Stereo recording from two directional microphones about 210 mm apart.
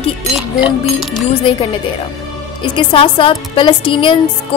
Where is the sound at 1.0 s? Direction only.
Centre (ahead or behind).